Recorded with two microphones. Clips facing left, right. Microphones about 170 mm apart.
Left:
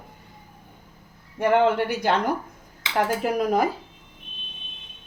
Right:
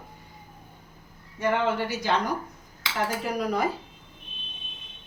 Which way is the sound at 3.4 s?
45° left (ahead or behind).